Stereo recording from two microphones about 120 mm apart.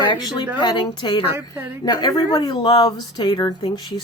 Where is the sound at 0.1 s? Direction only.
40° left (ahead or behind).